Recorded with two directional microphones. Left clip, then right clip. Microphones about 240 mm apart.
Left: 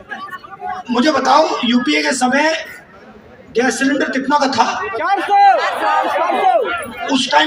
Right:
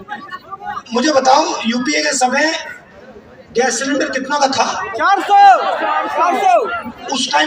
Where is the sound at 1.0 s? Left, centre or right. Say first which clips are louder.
Right 1 dB; centre.